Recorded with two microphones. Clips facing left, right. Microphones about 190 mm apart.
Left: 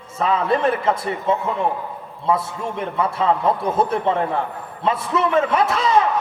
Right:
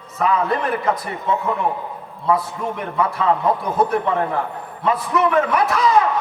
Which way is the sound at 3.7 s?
25° left (ahead or behind).